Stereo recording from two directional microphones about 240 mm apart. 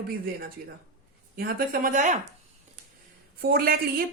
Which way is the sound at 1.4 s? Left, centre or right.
Right.